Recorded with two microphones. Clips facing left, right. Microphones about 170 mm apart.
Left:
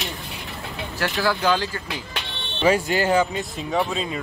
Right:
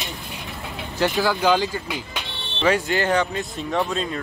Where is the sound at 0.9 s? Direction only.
15° right (ahead or behind).